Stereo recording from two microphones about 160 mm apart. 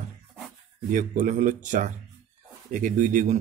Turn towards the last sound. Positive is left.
turn(degrees=-50)  # may be behind; listen again after turning